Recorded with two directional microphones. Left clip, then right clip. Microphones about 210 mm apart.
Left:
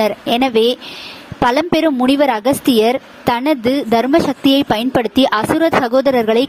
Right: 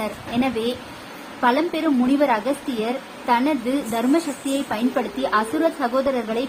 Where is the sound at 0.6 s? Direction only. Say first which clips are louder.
Left 11 dB; 50° left (ahead or behind).